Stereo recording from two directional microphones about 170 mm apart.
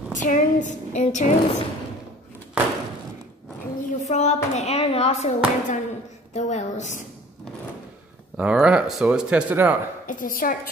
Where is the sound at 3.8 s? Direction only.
45° left (ahead or behind).